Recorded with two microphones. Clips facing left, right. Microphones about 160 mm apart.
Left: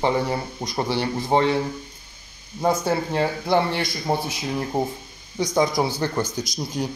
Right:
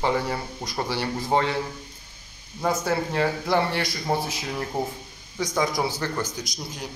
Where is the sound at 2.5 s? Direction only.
25° left (ahead or behind).